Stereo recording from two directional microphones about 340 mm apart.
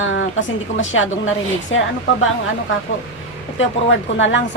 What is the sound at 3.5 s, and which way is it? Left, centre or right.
Speech, left.